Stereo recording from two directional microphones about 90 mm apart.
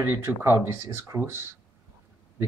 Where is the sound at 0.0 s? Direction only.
25° right (ahead or behind).